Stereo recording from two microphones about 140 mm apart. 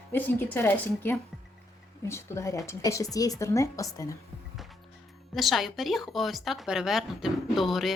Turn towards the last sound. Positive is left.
turn(degrees=0)  # may be behind; listen again after turning